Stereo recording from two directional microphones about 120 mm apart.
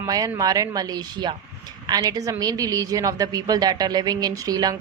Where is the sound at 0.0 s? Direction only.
30° right (ahead or behind).